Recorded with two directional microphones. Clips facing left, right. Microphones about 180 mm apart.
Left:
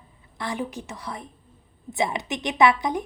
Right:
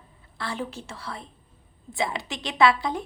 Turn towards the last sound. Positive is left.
turn(degrees=20)  # may be behind; listen again after turning